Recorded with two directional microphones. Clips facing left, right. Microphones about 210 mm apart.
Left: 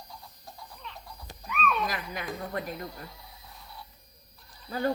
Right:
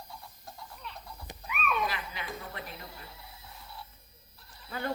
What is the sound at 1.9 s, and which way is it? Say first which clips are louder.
A woman's voice: left 4 dB; 45° left (ahead or behind).